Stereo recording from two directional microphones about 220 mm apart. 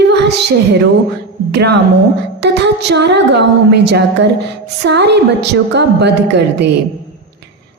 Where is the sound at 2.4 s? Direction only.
50° right (ahead or behind).